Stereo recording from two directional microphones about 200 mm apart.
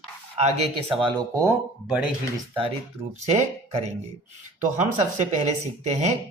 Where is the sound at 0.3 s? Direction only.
30° right (ahead or behind).